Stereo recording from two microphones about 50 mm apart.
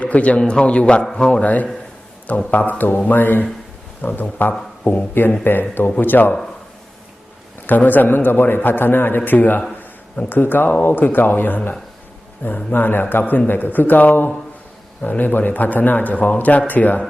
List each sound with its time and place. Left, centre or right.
0.0 s a man's voice: left
4.8 s speech: left
5.5 s a man's voice: left
7.7 s a man's voice: left